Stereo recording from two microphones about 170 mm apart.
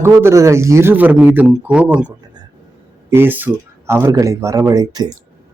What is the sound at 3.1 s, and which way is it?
A man's voice, 10° right (ahead or behind).